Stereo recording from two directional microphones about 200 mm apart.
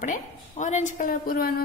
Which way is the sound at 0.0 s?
40° left (ahead or behind).